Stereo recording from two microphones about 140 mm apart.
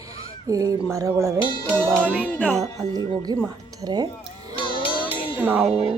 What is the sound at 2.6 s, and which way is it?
A woman's voice, 30° right (ahead or behind).